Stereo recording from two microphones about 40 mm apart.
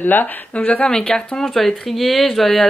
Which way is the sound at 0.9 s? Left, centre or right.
Centre.